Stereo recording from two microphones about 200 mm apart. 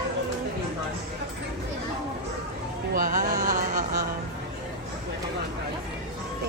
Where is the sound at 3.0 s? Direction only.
45° right (ahead or behind).